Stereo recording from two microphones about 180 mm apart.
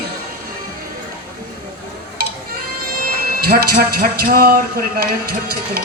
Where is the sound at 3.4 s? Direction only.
55° right (ahead or behind).